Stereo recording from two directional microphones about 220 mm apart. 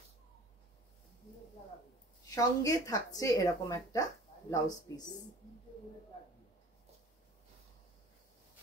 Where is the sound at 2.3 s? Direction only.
15° left (ahead or behind).